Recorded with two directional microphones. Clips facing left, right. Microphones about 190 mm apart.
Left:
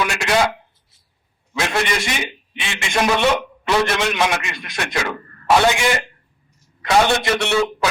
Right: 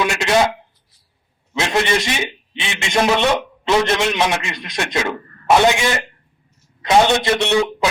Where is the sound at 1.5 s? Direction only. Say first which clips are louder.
Right 3 dB; 20° right (ahead or behind).